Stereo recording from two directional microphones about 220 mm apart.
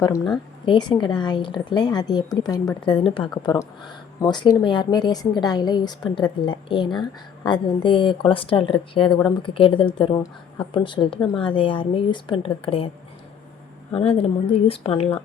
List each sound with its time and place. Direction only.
0.6 s speech: 20° left (ahead or behind)
13.9 s speech: 25° left (ahead or behind)